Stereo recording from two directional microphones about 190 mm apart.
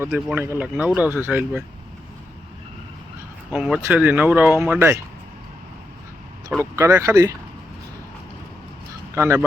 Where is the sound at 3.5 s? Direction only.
5° right (ahead or behind).